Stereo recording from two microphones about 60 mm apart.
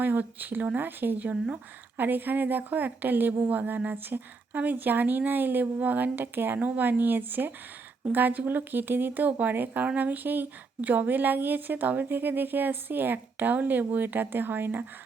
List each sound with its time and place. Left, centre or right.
0.0 s speech: right